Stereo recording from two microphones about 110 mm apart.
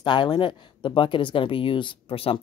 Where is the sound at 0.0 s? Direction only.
40° left (ahead or behind).